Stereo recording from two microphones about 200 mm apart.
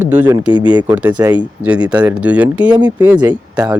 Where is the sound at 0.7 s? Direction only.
20° right (ahead or behind).